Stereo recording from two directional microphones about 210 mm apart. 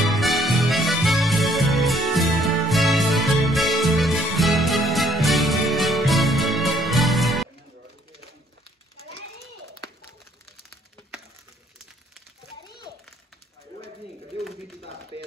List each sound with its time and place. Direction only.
0.0 s music: centre (ahead or behind)
9.0 s children playing: 70° right (ahead or behind)
12.6 s children playing: 20° left (ahead or behind)
15.1 s a sound: 25° left (ahead or behind)